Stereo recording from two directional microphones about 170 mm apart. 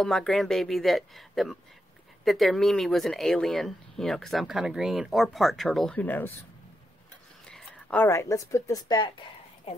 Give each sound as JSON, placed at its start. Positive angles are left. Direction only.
{"t": 0.0, "sound": "speech", "side_deg": 0}
{"t": 7.4, "sound": "speech", "side_deg": 5}
{"t": 9.7, "sound": "speech", "side_deg": 35}